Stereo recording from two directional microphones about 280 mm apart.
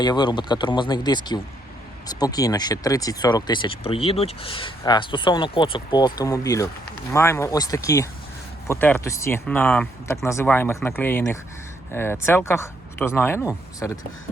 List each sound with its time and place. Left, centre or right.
0.0 s speech: centre